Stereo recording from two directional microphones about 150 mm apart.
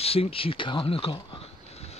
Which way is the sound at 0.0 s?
40° left (ahead or behind).